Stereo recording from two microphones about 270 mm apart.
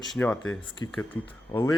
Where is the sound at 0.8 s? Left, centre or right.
Centre.